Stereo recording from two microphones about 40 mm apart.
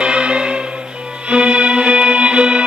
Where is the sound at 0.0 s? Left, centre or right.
Right.